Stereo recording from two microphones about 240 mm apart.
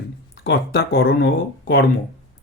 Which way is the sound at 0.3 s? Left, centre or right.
Left.